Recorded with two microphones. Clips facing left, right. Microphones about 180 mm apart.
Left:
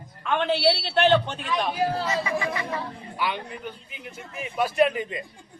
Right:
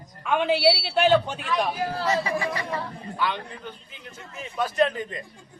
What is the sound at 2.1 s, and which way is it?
Speech, 35° right (ahead or behind).